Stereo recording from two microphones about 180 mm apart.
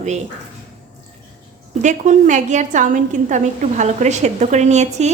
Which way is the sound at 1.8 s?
45° right (ahead or behind).